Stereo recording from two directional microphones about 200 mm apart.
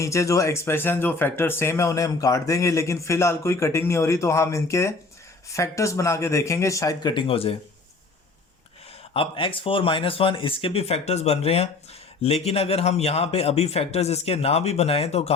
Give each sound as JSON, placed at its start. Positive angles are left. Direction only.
{"t": 0.0, "sound": "speech", "side_deg": 15}
{"t": 9.1, "sound": "a man's voice", "side_deg": 25}